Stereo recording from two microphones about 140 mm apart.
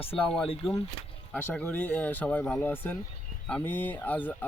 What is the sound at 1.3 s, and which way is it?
Speech, 10° left (ahead or behind).